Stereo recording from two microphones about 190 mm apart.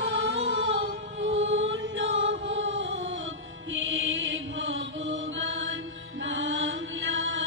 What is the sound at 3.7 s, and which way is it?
Chant, 85° right.